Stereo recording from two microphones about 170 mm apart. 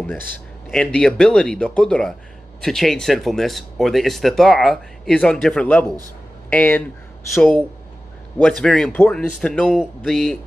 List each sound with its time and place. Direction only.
0.7 s speech: 5° left (ahead or behind)
5.9 s a man's voice: 20° right (ahead or behind)
6.5 s speech: 10° left (ahead or behind)